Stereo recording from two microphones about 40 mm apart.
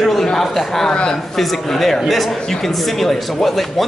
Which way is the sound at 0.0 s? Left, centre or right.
Centre.